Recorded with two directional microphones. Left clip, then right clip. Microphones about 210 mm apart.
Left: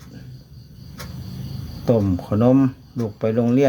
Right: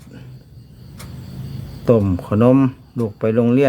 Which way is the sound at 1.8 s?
20° right (ahead or behind).